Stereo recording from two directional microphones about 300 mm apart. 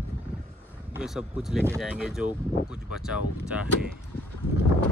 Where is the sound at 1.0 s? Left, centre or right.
Centre.